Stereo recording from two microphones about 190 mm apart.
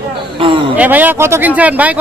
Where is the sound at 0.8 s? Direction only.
10° right (ahead or behind).